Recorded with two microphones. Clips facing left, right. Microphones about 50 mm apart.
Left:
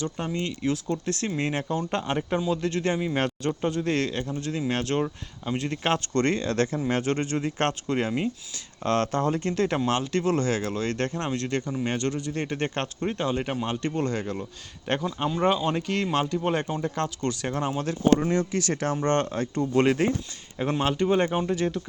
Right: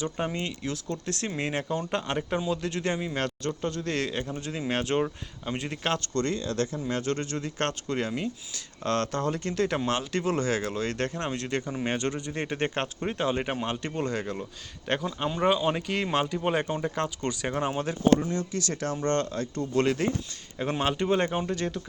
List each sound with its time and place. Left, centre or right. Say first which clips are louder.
0.2 s speech: right 1 dB; centre
0.6 s speech: left 6 dB; centre
3.2 s speech: left 4 dB; left
4.0 s speech: left 2 dB; centre
6.1 s speech: left 4 dB; left
7.0 s speech: left 4 dB; left; by 17.9 s centre
18.3 s speech: left 5 dB; left
20.7 s speech: left 2 dB; centre
21.2 s speech: left 3 dB; centre